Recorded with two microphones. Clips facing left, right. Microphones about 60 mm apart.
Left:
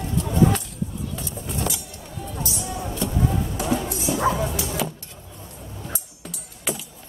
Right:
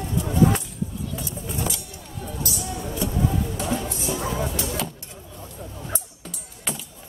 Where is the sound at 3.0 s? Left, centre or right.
Centre.